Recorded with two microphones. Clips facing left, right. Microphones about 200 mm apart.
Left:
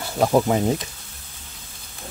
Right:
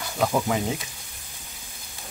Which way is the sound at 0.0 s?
40° left (ahead or behind).